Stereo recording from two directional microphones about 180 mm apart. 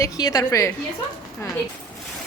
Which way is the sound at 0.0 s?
20° left (ahead or behind).